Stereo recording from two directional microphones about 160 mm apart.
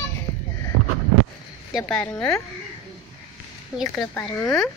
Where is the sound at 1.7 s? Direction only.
5° left (ahead or behind).